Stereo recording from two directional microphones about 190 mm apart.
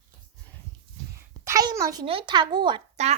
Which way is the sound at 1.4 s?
15° right (ahead or behind).